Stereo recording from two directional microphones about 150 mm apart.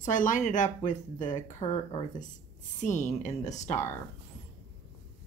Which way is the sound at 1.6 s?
30° left (ahead or behind).